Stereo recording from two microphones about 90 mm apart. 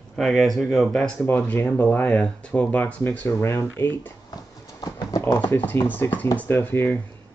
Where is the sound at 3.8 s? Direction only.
20° left (ahead or behind).